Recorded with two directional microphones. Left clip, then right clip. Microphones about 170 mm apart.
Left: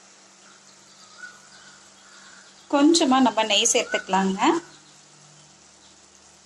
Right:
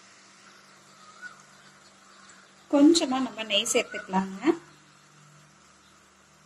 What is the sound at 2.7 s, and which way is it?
Speech, centre (ahead or behind).